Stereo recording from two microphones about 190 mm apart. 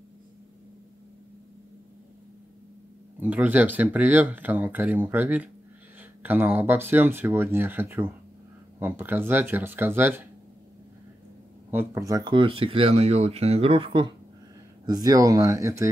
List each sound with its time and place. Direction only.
3.2 s speech: 10° right (ahead or behind)
11.7 s speech: 15° right (ahead or behind)